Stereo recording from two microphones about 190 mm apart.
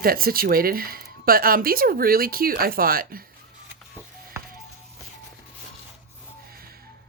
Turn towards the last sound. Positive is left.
turn(degrees=-50)  # may be behind; listen again after turning